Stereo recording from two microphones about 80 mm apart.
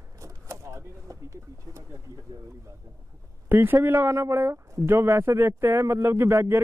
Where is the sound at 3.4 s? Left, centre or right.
Right.